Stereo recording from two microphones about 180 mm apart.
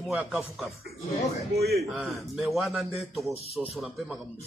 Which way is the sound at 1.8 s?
Centre (ahead or behind).